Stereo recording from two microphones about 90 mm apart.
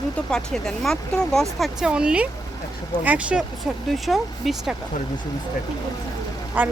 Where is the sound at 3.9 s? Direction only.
Centre (ahead or behind).